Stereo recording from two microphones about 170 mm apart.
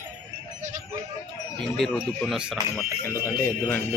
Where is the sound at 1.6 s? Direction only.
Centre (ahead or behind).